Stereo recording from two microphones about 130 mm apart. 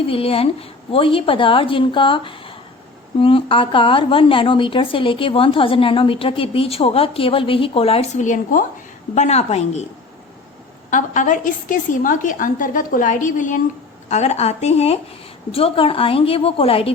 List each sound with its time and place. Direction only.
0.1 s a woman's voice: 45° left (ahead or behind); by 8.6 s 80° left
9.1 s a woman's voice: 60° left (ahead or behind)
10.9 s a woman's voice: 80° left
14.1 s a woman's voice: 60° left (ahead or behind)